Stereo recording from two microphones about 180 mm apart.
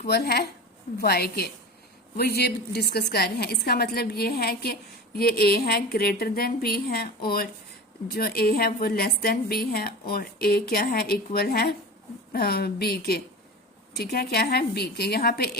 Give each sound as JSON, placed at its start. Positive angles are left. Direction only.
{"t": 0.0, "sound": "a woman's voice", "side_deg": 60}